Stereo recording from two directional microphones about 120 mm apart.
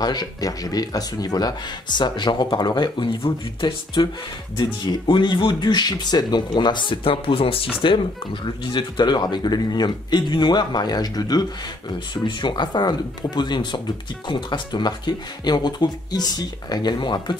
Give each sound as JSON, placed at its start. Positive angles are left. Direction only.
{"t": 0.0, "sound": "speech", "side_deg": 35}